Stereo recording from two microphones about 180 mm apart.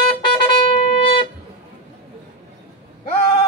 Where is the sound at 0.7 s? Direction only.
30° left (ahead or behind).